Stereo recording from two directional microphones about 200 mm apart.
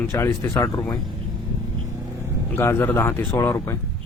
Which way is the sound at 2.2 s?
10° left (ahead or behind).